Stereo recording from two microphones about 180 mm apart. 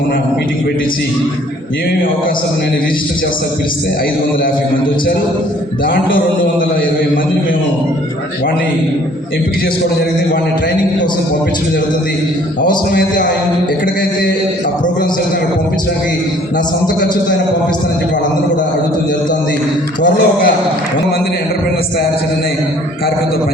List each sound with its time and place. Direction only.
12.6 s a man's voice: 50° left (ahead or behind)
20.0 s a man's voice: 55° left (ahead or behind)